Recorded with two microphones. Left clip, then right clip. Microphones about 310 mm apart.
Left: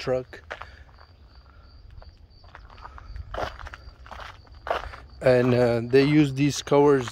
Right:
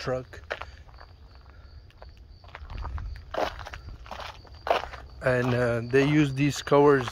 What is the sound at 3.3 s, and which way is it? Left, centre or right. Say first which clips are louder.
Walk: right 2 dB; right.